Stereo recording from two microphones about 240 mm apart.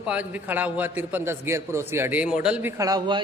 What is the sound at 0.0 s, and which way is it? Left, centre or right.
A man's voice, centre.